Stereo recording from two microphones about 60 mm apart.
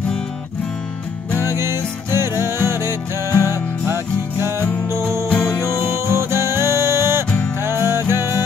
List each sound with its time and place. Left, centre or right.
1.4 s music: right
5.5 s music: left
5.9 s music: right